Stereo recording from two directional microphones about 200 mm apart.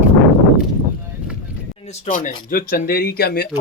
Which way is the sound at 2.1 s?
45° left (ahead or behind).